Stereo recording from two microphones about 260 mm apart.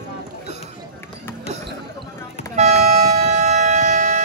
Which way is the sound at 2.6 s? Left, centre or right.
Right.